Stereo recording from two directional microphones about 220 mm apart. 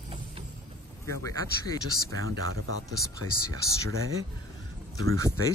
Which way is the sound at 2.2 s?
70° right (ahead or behind).